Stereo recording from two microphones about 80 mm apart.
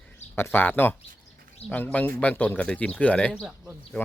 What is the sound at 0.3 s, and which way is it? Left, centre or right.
Speech, left.